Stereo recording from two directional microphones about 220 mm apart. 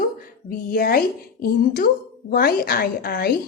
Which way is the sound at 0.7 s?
40° left (ahead or behind).